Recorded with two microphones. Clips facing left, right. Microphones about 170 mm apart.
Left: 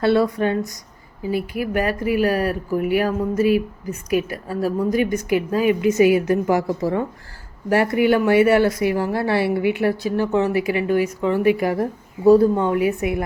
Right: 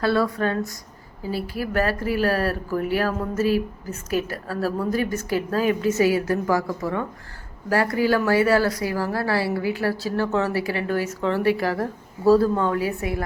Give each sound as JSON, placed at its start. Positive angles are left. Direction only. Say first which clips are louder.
{"t": 0.0, "sound": "a woman's voice", "louder": "left 4 dB", "side_deg": 25}